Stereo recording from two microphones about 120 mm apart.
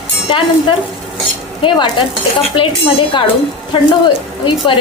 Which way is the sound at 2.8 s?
50° left (ahead or behind).